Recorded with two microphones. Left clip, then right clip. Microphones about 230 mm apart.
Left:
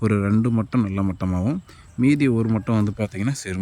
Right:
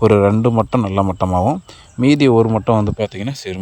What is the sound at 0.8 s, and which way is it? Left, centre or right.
Speech, centre.